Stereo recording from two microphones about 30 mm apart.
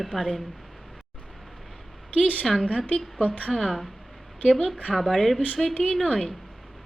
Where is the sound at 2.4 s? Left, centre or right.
Centre.